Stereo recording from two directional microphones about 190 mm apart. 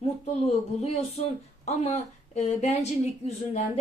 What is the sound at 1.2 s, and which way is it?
A woman's voice, 35° left (ahead or behind).